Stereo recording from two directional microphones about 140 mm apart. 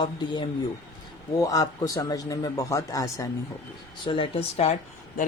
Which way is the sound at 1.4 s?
25° left (ahead or behind).